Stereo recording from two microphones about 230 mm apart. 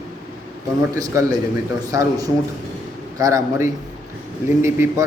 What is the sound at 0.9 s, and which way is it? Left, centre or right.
A man's voice, centre.